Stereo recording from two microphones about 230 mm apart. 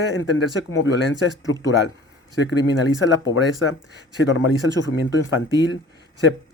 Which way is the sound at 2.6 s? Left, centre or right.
Left.